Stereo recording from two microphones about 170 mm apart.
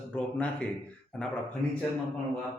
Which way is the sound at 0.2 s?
5° left (ahead or behind).